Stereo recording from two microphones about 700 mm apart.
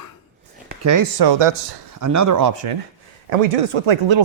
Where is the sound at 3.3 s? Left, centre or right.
Right.